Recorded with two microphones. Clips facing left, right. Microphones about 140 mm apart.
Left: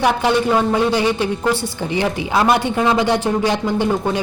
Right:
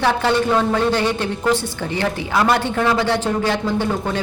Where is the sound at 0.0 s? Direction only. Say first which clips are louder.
Left 1 dB; 15° left (ahead or behind).